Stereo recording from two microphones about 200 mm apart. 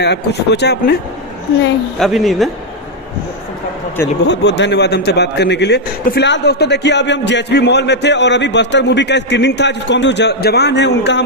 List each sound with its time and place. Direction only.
0.0 s a man's voice: 55° left (ahead or behind)
2.0 s speech: centre (ahead or behind)
4.3 s a man's voice: 60° left (ahead or behind)